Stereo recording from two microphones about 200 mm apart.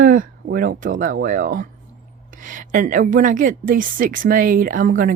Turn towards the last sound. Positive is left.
turn(degrees=-40)  # may be behind; listen again after turning